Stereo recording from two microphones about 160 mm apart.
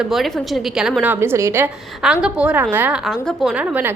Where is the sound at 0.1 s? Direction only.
Centre (ahead or behind).